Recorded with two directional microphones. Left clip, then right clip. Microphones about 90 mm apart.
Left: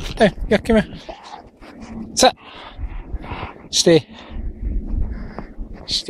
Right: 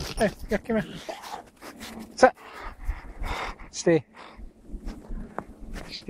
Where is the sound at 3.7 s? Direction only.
50° left (ahead or behind).